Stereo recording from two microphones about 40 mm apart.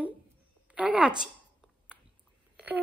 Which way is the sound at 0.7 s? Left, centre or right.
Right.